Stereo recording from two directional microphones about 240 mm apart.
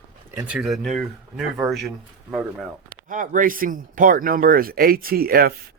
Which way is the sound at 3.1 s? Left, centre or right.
Right.